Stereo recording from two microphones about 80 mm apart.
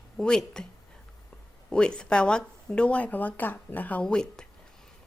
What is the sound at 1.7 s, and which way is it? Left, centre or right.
Speech, centre.